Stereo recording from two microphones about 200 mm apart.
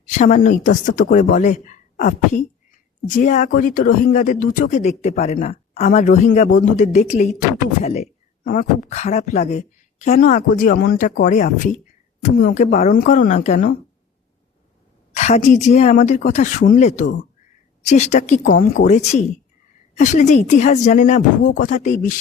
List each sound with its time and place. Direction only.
0.1 s speech: 40° left (ahead or behind)
15.1 s speech: 35° left (ahead or behind)